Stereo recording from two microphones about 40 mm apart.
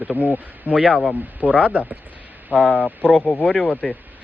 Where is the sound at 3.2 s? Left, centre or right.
Left.